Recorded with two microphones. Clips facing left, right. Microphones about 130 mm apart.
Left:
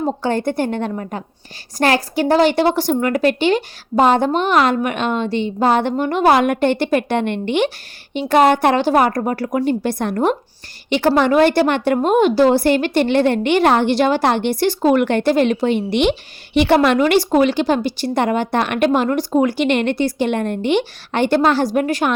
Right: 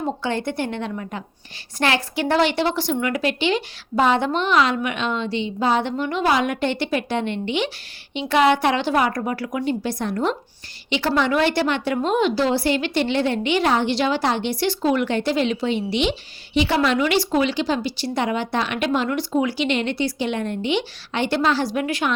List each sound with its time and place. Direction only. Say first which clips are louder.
0.0 s a woman's voice: left 5 dB; 45° left (ahead or behind)